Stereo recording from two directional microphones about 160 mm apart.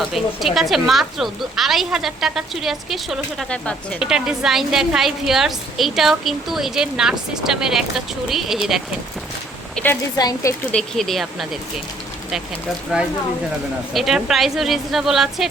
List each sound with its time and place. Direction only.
0.1 s a woman's voice: centre (ahead or behind)
4.0 s a woman's voice: 5° right (ahead or behind)
9.7 s a woman's voice: 10° left (ahead or behind)
10.2 s speech: 25° left (ahead or behind)
10.7 s a woman's voice: 5° left (ahead or behind)
13.9 s a woman's voice: centre (ahead or behind)